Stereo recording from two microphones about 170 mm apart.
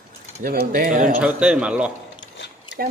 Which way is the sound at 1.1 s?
5° right (ahead or behind).